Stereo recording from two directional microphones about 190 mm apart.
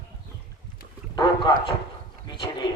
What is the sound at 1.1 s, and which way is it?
A man's voice, 25° left (ahead or behind).